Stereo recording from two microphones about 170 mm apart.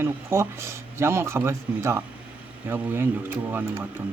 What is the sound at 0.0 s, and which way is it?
Speech, 15° right (ahead or behind).